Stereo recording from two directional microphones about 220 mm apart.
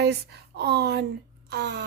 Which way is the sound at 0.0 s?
50° right (ahead or behind).